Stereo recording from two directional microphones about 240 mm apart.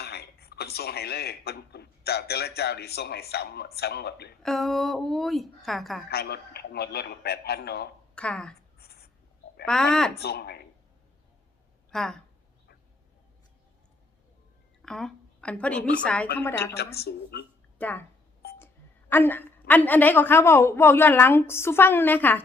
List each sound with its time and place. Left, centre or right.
0.0 s a man's voice: left
4.4 s a woman's voice: centre
6.1 s a man's voice: left
8.1 s a woman's voice: centre
8.8 s writing: left
9.6 s a woman's voice: centre
10.2 s a man's voice: left
11.9 s speech: centre
14.8 s a sound: centre
16.0 s a woman's voice: centre
16.7 s a man's voice: left
17.7 s a woman's voice: centre